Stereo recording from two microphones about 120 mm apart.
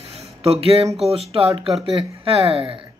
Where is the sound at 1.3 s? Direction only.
55° right (ahead or behind).